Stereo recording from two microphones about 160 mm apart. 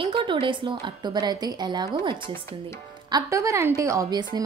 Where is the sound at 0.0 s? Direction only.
30° right (ahead or behind).